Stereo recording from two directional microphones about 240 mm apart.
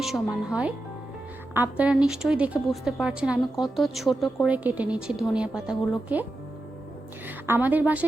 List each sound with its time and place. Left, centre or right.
0.0 s a woman's voice: centre
7.3 s a woman's voice: centre